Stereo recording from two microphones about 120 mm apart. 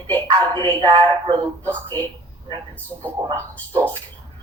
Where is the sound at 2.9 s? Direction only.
20° right (ahead or behind).